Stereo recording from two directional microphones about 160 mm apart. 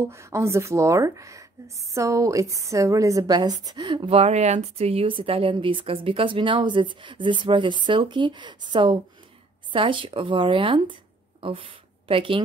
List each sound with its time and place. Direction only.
0.0 s a woman's voice: 15° right (ahead or behind); by 12.4 s 35° right (ahead or behind)